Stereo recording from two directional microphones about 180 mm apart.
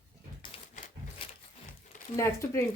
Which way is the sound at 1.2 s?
30° left (ahead or behind).